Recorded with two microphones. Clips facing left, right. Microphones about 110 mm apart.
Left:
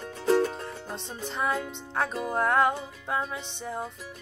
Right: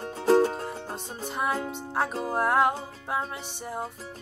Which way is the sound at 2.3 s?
5° right (ahead or behind).